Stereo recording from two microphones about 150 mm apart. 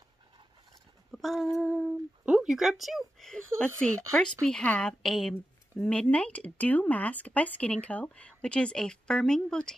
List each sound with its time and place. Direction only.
1.1 s female singing: centre (ahead or behind)
1.6 s speech: 5° right (ahead or behind)